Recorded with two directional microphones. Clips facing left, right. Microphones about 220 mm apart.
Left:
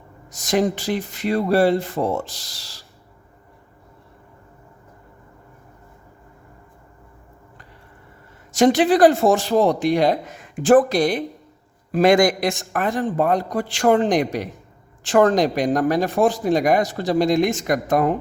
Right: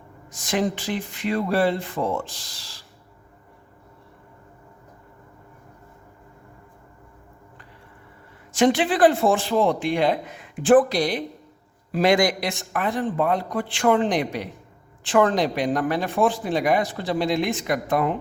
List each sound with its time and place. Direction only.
0.3 s speech: 40° left (ahead or behind)
8.5 s a man's voice: 40° left (ahead or behind)